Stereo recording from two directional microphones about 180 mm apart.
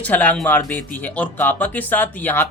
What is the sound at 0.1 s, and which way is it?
Speech, 10° left (ahead or behind).